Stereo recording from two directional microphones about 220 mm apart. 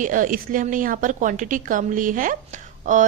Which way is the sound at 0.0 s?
35° right (ahead or behind).